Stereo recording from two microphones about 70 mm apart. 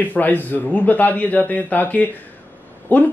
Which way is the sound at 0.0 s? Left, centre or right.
Left.